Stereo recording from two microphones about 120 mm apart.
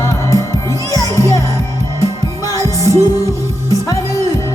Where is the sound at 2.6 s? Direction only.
25° right (ahead or behind).